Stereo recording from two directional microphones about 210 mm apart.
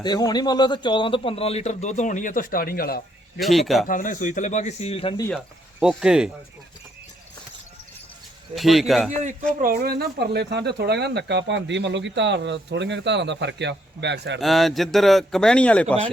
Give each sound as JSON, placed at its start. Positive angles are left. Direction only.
{"t": 0.0, "sound": "a man's voice", "side_deg": 20}
{"t": 3.4, "sound": "a man's voice", "side_deg": 0}
{"t": 3.8, "sound": "speech", "side_deg": 40}
{"t": 5.8, "sound": "a man's voice", "side_deg": -5}
{"t": 8.5, "sound": "a man's voice", "side_deg": 0}
{"t": 9.6, "sound": "speech", "side_deg": -45}
{"t": 14.3, "sound": "a man's voice", "side_deg": 0}